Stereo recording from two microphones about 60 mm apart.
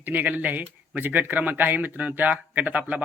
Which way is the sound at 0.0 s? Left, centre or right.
Right.